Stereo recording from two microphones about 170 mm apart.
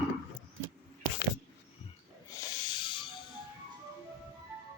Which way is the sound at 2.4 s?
25° left (ahead or behind).